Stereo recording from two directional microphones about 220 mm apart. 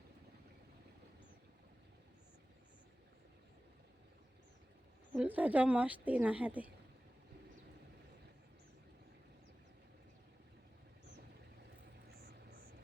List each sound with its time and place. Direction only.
5.1 s a woman's voice: 5° right (ahead or behind)